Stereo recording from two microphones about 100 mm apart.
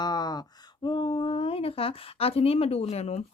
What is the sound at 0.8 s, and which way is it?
Speech, 55° left (ahead or behind).